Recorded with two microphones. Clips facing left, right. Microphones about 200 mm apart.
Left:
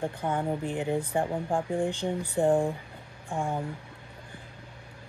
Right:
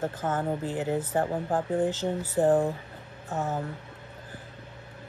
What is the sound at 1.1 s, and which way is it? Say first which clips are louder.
Speech: right 1 dB; 15° left (ahead or behind).